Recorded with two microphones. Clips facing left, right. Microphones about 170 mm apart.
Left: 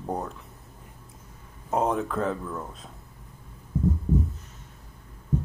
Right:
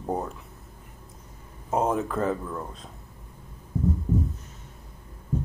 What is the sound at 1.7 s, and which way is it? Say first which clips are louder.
Speech: even; centre (ahead or behind).